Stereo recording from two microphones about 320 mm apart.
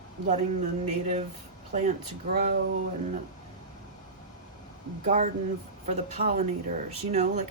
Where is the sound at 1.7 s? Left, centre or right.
Right.